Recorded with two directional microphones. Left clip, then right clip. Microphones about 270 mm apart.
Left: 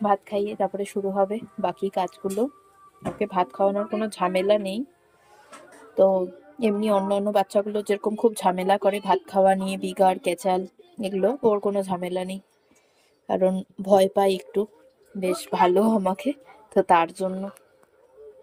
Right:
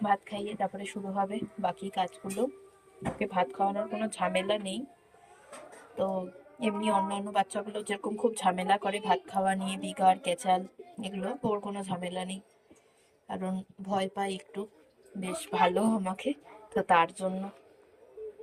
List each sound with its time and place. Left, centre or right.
0.0 s a woman's voice: centre
6.6 s a woman's voice: left